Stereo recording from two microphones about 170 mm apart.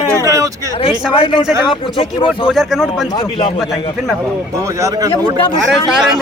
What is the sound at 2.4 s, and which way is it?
Speech, 5° right (ahead or behind).